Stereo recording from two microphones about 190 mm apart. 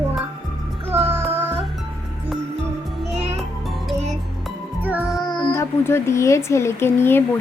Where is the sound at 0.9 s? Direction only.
30° right (ahead or behind).